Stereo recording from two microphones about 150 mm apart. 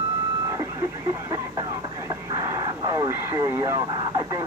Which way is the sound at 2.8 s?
25° right (ahead or behind).